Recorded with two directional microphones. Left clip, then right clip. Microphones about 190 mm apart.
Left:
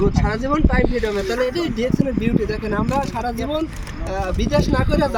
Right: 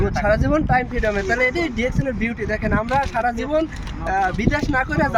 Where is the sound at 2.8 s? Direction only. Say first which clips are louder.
Right 1 dB; 5° right (ahead or behind).